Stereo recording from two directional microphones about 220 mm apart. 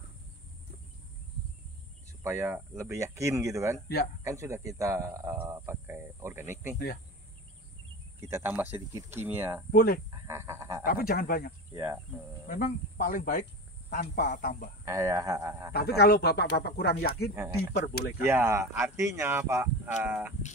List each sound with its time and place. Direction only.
2.2 s speech: 10° right (ahead or behind)
8.3 s speech: 10° right (ahead or behind)
9.7 s speech: 45° left (ahead or behind)
10.2 s frog: 10° right (ahead or behind)
10.9 s speech: 40° left (ahead or behind)
14.9 s speech: 15° right (ahead or behind)
15.7 s speech: 45° left (ahead or behind)
18.2 s speech: 10° right (ahead or behind)